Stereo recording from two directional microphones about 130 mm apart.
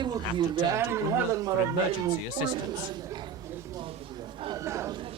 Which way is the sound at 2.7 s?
30° right (ahead or behind).